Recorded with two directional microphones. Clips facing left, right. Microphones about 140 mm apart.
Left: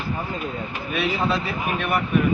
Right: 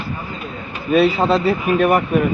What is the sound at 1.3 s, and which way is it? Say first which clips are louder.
Speech: right 9 dB; 35° right (ahead or behind).